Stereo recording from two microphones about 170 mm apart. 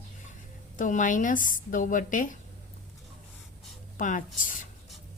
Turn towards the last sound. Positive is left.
turn(degrees=50)  # may be behind; listen again after turning